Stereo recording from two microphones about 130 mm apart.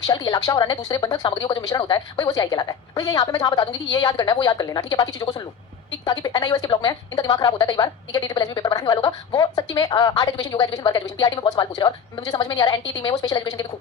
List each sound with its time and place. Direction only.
0.0 s speech: 30° left (ahead or behind)